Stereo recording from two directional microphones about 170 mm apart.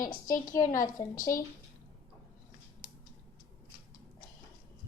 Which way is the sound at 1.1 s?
55° left (ahead or behind).